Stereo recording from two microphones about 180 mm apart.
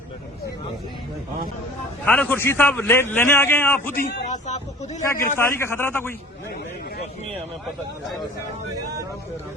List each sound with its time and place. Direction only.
2.0 s a man's voice: 10° left (ahead or behind)
4.3 s a sound: 40° left (ahead or behind)
5.4 s a man's voice: 15° left (ahead or behind)